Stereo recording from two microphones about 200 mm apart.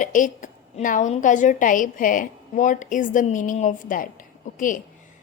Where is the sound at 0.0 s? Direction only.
40° left (ahead or behind).